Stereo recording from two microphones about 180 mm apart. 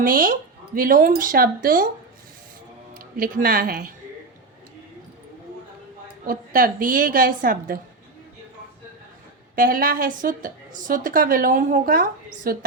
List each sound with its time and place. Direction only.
0.0 s a woman's voice: 50° right (ahead or behind)
3.0 s speech: 50° right (ahead or behind)
6.2 s a woman's voice: 50° right (ahead or behind)
9.6 s a woman's voice: 50° right (ahead or behind)